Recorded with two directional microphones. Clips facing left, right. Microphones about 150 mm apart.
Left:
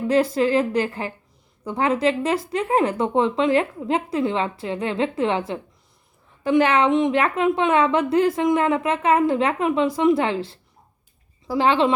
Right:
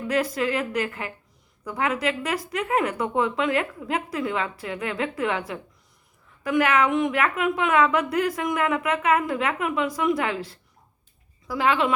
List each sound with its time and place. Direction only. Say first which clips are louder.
0.0 s a woman's voice: left 5 dB; 30° left (ahead or behind)